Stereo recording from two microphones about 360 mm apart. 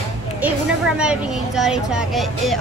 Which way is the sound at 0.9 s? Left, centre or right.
Centre.